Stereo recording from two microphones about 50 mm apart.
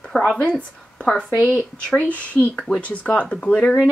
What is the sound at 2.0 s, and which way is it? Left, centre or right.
Speech, left.